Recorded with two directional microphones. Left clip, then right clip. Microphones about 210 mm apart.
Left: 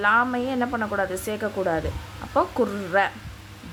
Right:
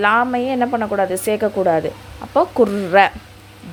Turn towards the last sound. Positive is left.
turn(degrees=-30)  # may be behind; listen again after turning